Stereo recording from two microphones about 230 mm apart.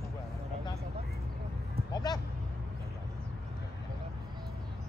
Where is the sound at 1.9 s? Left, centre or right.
Centre.